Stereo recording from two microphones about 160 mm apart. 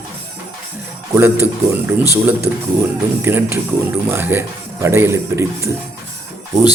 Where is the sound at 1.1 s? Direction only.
15° right (ahead or behind).